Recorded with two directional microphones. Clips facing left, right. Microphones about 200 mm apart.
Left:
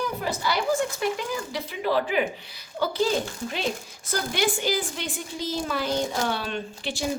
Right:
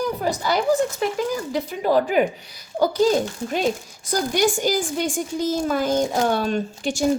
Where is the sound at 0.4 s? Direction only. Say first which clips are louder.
Right 5 dB; 45° right (ahead or behind).